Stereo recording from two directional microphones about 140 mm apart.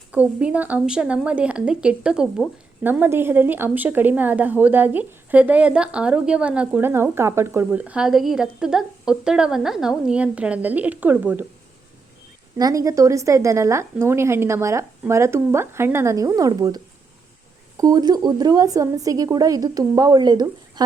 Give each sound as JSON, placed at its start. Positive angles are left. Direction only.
{"t": 0.1, "sound": "a woman's voice", "side_deg": -10}
{"t": 12.5, "sound": "a woman's voice", "side_deg": -25}